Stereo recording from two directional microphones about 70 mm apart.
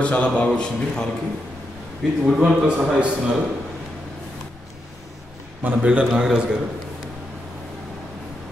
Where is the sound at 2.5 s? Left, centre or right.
Centre.